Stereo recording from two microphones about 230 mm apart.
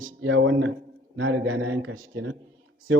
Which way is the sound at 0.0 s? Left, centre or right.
Right.